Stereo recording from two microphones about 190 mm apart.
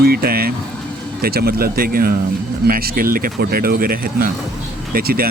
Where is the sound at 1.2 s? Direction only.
55° right (ahead or behind).